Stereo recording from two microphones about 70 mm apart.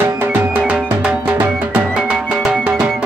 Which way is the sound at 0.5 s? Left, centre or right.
Centre.